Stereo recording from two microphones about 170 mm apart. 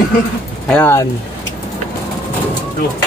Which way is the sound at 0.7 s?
10° left (ahead or behind).